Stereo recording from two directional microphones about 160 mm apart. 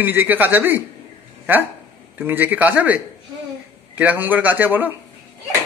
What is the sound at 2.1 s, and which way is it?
A man's voice, 10° right (ahead or behind).